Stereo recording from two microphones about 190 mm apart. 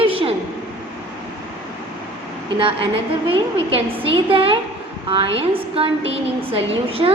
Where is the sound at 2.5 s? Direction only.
25° right (ahead or behind).